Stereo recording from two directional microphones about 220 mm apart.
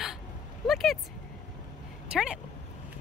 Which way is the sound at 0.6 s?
Centre (ahead or behind).